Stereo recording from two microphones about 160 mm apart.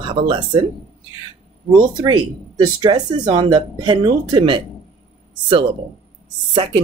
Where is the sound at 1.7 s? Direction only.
25° right (ahead or behind).